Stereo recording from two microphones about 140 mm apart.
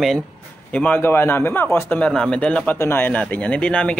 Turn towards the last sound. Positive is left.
turn(degrees=10)  # may be behind; listen again after turning